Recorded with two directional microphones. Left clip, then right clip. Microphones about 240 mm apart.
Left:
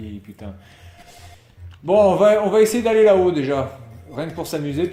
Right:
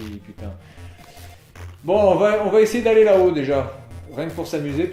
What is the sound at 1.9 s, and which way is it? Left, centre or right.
Speech, left.